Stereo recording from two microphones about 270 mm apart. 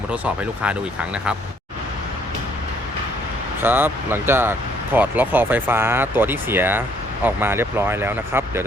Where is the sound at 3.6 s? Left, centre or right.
Centre.